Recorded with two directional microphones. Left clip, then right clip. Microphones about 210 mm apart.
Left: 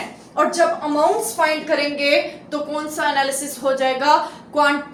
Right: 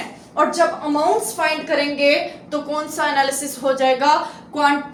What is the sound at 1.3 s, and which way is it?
A woman's voice, 10° right (ahead or behind).